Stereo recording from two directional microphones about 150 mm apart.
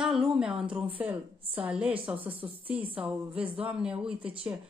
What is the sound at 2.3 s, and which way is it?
Speech, 35° right (ahead or behind).